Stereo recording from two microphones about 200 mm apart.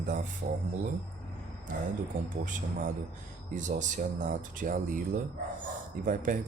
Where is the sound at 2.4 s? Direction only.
40° right (ahead or behind).